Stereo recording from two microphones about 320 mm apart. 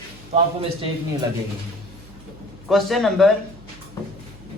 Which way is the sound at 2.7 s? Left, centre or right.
Centre.